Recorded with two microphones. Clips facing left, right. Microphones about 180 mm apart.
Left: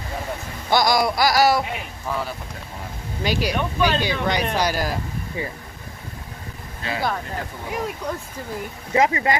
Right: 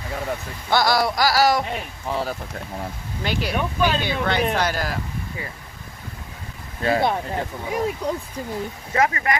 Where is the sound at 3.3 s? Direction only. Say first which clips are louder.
Left 2 dB; 15° left (ahead or behind).